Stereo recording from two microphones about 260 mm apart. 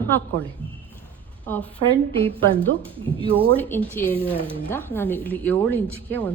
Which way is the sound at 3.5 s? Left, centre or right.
Centre.